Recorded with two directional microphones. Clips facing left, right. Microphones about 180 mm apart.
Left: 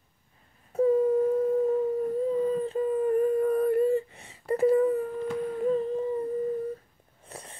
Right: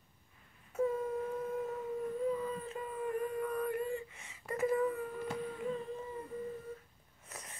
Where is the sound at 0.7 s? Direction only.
30° left (ahead or behind).